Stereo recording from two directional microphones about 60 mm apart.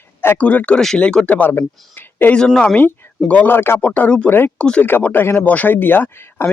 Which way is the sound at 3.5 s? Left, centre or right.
Left.